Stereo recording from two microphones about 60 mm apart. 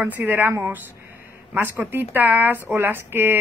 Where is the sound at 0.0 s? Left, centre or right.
Right.